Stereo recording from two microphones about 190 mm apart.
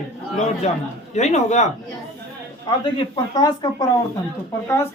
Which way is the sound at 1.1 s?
35° left (ahead or behind).